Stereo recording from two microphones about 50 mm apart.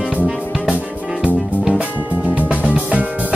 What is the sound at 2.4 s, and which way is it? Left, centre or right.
Music, right.